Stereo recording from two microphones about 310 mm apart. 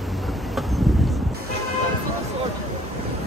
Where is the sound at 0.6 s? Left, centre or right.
Centre.